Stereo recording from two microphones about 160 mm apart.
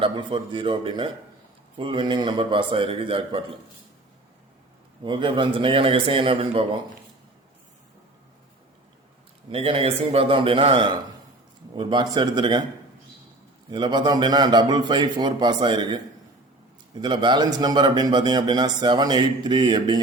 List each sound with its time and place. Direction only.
0.0 s a man's voice: 30° right (ahead or behind)
5.0 s a man's voice: 30° right (ahead or behind)
9.5 s a man's voice: 35° right (ahead or behind)
13.7 s a man's voice: 25° right (ahead or behind)
17.0 s a man's voice: 30° right (ahead or behind)